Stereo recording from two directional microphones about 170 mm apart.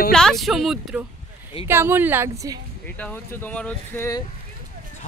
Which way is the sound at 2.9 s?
10° left (ahead or behind).